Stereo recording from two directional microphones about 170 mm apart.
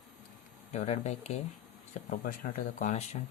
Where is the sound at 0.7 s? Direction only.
40° left (ahead or behind).